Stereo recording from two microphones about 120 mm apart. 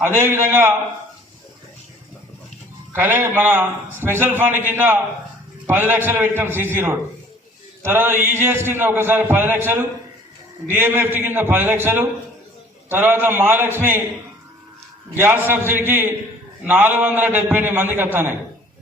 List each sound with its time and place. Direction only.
0.2 s a man's voice: 20° right (ahead or behind)
2.9 s a man's voice: 15° right (ahead or behind)
7.8 s mantra: 20° right (ahead or behind)
8.3 s a man's voice: 20° right (ahead or behind)
10.7 s a man's voice: 20° right (ahead or behind)
15.1 s a man's voice: 20° right (ahead or behind)